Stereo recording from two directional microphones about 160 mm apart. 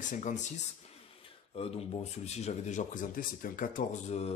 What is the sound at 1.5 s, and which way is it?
Speech, 40° left (ahead or behind).